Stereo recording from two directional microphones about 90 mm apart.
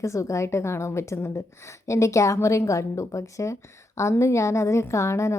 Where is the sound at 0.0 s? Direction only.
35° left (ahead or behind).